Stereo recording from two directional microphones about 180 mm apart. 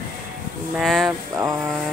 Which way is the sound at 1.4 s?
20° right (ahead or behind).